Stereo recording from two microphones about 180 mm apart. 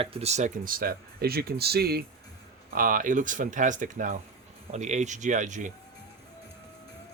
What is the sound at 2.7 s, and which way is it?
Speech, 50° right (ahead or behind).